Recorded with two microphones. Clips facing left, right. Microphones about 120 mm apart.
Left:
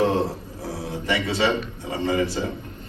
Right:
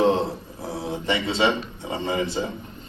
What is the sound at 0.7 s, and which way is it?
Speech, 20° right (ahead or behind).